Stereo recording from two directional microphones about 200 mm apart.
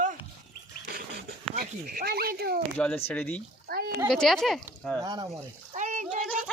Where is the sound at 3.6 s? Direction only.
50° right (ahead or behind).